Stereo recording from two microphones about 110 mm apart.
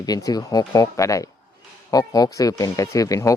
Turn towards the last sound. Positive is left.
turn(degrees=30)  # may be behind; listen again after turning